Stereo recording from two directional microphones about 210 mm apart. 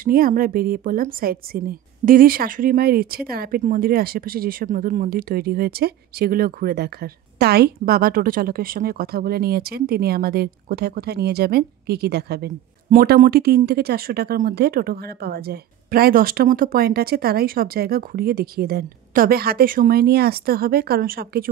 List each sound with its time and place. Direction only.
0.0 s a woman's voice: 40° right (ahead or behind)